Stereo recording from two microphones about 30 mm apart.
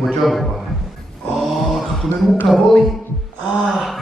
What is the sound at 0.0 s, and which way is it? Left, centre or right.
Speech, centre.